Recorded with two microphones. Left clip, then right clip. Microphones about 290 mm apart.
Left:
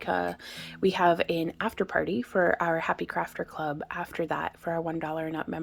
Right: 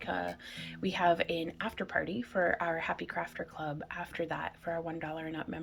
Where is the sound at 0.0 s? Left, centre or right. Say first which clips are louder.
Left 7 dB; centre.